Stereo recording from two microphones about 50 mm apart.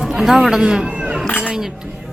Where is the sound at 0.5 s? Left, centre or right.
Centre.